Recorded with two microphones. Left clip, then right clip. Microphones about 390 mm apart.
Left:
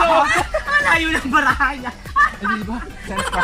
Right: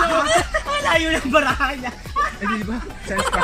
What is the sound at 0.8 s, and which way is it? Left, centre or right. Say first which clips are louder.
Speech: left 2 dB; centre.